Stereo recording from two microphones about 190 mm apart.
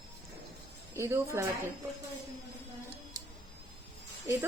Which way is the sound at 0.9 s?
15° right (ahead or behind).